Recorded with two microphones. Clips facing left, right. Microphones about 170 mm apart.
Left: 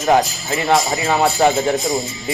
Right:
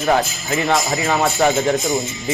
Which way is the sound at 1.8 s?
Centre (ahead or behind).